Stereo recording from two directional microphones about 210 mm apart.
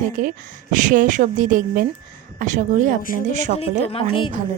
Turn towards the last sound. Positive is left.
turn(degrees=25)  # may be behind; listen again after turning